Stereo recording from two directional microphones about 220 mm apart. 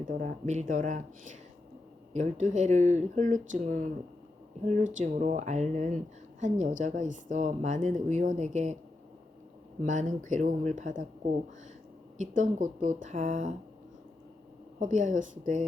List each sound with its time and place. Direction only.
0.0 s a woman's voice: 35° right (ahead or behind)
4.9 s a woman's voice: 35° right (ahead or behind)
9.8 s a woman's voice: 35° right (ahead or behind)
12.4 s a woman's voice: 35° right (ahead or behind)
14.8 s a woman's voice: 35° right (ahead or behind)